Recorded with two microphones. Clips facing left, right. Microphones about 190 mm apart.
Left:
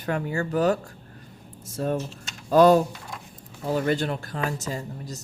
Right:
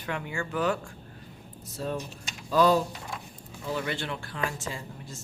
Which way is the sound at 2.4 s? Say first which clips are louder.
Left 6 dB; 50° left (ahead or behind).